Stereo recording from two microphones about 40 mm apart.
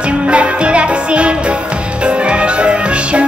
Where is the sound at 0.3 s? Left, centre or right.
Right.